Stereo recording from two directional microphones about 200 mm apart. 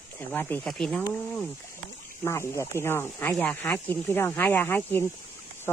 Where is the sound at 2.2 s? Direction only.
15° left (ahead or behind).